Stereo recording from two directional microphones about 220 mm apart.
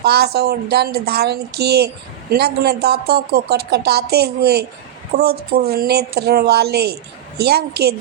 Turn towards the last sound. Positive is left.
turn(degrees=-45)  # may be behind; listen again after turning